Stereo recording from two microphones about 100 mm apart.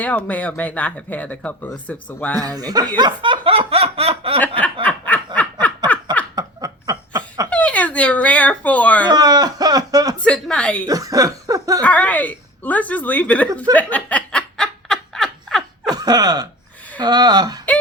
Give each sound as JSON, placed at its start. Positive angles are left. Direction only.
{"t": 0.0, "sound": "speech", "side_deg": 15}
{"t": 2.3, "sound": "speech", "side_deg": -40}
{"t": 3.2, "sound": "snicker", "side_deg": -55}
{"t": 4.6, "sound": "snicker", "side_deg": 15}
{"t": 6.3, "sound": "a sound", "side_deg": -40}
{"t": 7.5, "sound": "speech", "side_deg": 15}
{"t": 9.0, "sound": "a sound", "side_deg": -40}
{"t": 10.2, "sound": "speech", "side_deg": 10}
{"t": 10.8, "sound": "speech", "side_deg": -35}
{"t": 11.8, "sound": "a woman's voice", "side_deg": 15}
{"t": 13.7, "sound": "snicker", "side_deg": 15}
{"t": 15.9, "sound": "chuckle", "side_deg": -40}
{"t": 17.0, "sound": "speech", "side_deg": -45}